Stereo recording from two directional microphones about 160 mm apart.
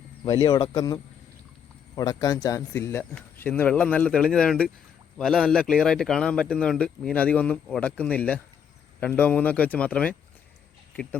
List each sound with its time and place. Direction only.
0.3 s speech: 25° left (ahead or behind)
2.0 s speech: 25° left (ahead or behind); by 10.2 s 10° left (ahead or behind)